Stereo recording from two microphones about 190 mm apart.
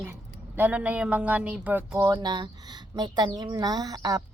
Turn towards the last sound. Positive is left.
turn(degrees=-20)  # may be behind; listen again after turning